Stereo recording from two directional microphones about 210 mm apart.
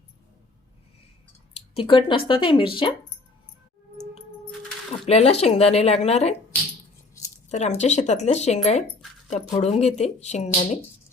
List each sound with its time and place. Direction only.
1.5 s speech: 25° left (ahead or behind)
5.0 s speech: 30° left (ahead or behind)
7.5 s speech: 35° left (ahead or behind)